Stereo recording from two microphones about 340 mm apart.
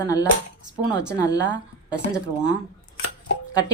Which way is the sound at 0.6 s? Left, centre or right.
Right.